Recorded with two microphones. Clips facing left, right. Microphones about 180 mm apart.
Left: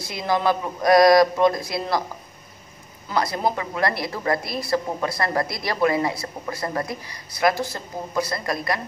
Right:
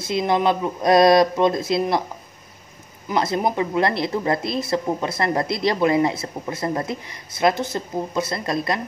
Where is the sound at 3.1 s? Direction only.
20° right (ahead or behind).